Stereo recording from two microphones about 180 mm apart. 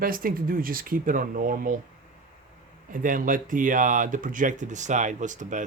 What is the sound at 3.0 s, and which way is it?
Speech, 50° right (ahead or behind).